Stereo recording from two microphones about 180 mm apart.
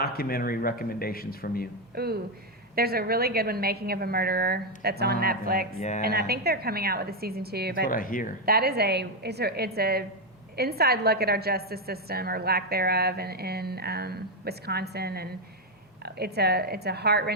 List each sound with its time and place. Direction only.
0.0 s speech: 55° left (ahead or behind)
1.9 s a woman's voice: 60° right (ahead or behind)
7.9 s speech: 50° left (ahead or behind)
8.4 s a woman's voice: 60° right (ahead or behind)